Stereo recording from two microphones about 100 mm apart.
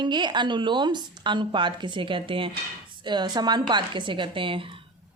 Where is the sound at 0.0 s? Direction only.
45° right (ahead or behind).